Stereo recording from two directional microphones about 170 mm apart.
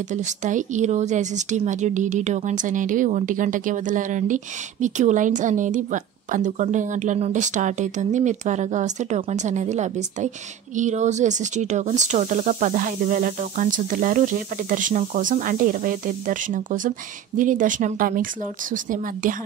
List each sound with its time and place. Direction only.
0.1 s speech: 45° right (ahead or behind)